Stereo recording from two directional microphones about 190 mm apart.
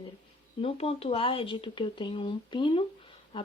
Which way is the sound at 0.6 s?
30° left (ahead or behind).